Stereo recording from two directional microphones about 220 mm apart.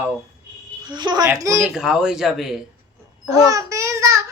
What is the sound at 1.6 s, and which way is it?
Speech, centre (ahead or behind).